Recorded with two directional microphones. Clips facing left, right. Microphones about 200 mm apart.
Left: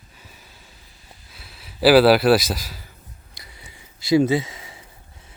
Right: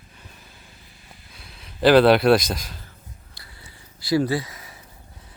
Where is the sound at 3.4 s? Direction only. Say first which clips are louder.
Left 2 dB; 20° left (ahead or behind).